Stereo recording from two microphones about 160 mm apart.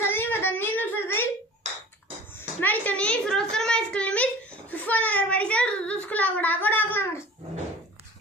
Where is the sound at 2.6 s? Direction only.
10° left (ahead or behind).